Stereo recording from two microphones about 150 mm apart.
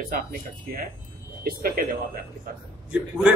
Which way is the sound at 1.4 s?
80° right.